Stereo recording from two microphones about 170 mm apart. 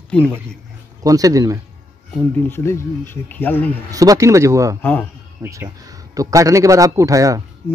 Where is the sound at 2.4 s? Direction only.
15° left (ahead or behind).